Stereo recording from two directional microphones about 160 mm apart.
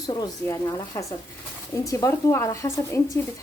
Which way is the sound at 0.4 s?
20° left (ahead or behind).